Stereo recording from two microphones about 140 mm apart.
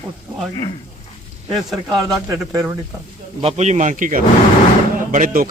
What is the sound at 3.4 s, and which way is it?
Speech, 55° right (ahead or behind).